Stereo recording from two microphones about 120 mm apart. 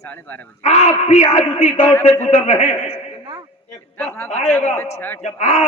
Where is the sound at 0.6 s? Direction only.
75° left (ahead or behind).